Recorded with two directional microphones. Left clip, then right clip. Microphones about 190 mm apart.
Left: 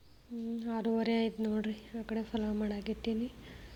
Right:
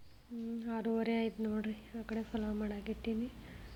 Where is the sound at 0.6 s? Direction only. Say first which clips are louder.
Left 3 dB; 35° left (ahead or behind).